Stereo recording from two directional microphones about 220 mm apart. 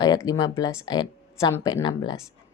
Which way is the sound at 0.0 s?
20° left (ahead or behind).